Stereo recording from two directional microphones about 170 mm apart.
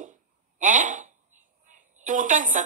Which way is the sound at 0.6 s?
50° right (ahead or behind).